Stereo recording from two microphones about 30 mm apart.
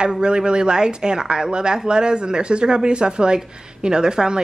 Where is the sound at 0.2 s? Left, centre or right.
Right.